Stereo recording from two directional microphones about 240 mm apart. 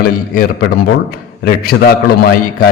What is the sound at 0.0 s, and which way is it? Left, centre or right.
A man's voice, left.